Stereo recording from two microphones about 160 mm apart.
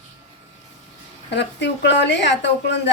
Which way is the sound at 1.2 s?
90° left.